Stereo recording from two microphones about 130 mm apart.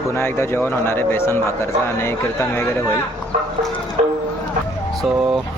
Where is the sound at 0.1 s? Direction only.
20° left (ahead or behind).